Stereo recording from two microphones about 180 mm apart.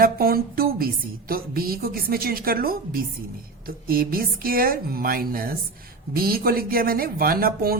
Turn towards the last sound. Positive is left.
turn(degrees=-55)  # may be behind; listen again after turning